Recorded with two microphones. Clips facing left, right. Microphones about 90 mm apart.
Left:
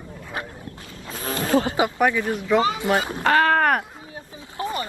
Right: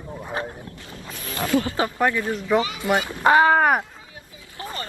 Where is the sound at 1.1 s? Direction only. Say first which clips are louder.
Left 2 dB; 30° left (ahead or behind).